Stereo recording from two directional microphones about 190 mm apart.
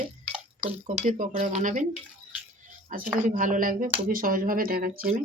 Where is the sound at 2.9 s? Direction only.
45° right (ahead or behind).